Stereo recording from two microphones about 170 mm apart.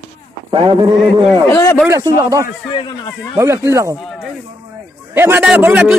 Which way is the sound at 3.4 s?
15° right (ahead or behind).